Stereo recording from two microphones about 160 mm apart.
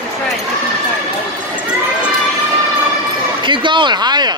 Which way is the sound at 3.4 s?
30° right (ahead or behind).